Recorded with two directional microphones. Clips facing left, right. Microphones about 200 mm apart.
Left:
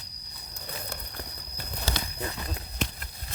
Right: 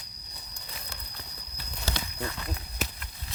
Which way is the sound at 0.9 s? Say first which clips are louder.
Left 6 dB; 50° left (ahead or behind).